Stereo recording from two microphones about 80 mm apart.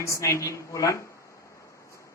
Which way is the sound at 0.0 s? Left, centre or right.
Left.